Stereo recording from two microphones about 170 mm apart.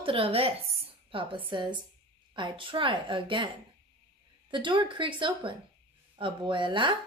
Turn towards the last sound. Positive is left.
turn(degrees=-30)  # may be behind; listen again after turning